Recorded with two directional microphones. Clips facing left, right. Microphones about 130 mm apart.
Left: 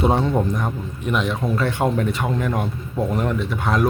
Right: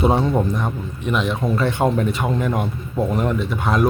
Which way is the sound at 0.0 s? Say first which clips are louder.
Right 1 dB; 10° right (ahead or behind).